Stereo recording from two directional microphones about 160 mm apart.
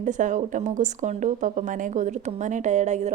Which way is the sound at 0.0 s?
50° right (ahead or behind).